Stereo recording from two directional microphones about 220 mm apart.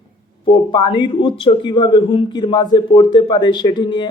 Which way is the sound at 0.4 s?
20° left (ahead or behind).